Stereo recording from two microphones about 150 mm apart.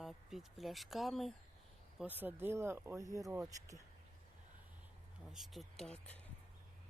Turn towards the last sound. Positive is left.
turn(degrees=5)  # may be behind; listen again after turning